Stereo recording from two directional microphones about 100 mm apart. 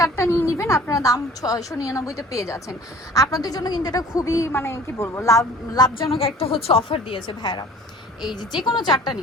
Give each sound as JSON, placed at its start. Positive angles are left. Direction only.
{"t": 0.0, "sound": "a woman's voice", "side_deg": 30}
{"t": 6.0, "sound": "a woman's voice", "side_deg": 70}
{"t": 6.8, "sound": "a woman's voice", "side_deg": 60}